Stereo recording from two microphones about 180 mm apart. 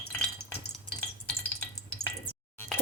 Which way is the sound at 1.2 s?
10° left (ahead or behind).